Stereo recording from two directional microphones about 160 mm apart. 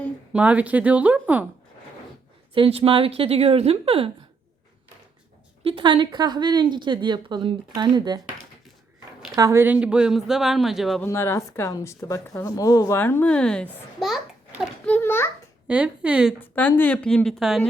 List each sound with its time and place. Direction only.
0.3 s speech: 10° right (ahead or behind)
2.6 s a woman's voice: 35° right (ahead or behind)
5.6 s speech: 30° right (ahead or behind)
9.3 s speech: 20° right (ahead or behind); by 11.0 s centre (ahead or behind)
11.0 s a woman's voice: 15° left (ahead or behind)
15.6 s speech: 10° right (ahead or behind)
16.4 s a woman's voice: 10° left (ahead or behind)